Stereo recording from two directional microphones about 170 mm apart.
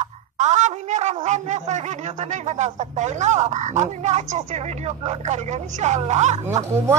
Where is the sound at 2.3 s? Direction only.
40° right (ahead or behind).